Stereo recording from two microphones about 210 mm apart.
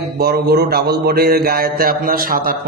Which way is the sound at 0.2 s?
50° right (ahead or behind).